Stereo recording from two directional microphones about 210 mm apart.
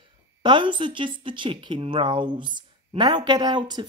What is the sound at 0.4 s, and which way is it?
A woman's voice, 20° right (ahead or behind).